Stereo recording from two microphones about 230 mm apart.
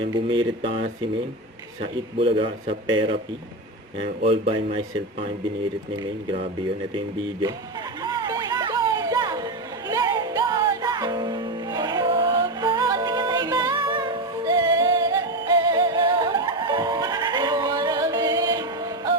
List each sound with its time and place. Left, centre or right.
0.1 s speech: right
2.1 s speech: right
6.0 s speech: right
8.0 s music: centre